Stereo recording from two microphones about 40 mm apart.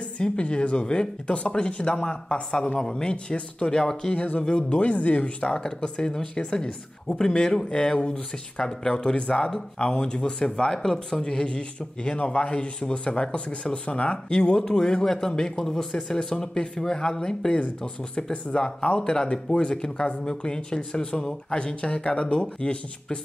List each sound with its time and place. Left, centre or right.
0.2 s speech: left
4.1 s speech: left